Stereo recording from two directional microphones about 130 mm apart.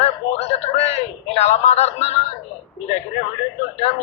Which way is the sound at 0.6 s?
55° left (ahead or behind).